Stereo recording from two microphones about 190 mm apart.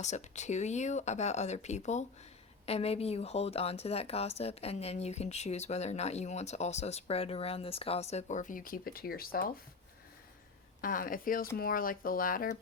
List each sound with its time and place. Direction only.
0.0 s a woman's voice: 40° left (ahead or behind)
10.8 s speech: 50° left (ahead or behind)